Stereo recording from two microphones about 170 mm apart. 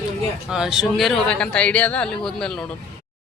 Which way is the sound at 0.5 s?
5° right (ahead or behind).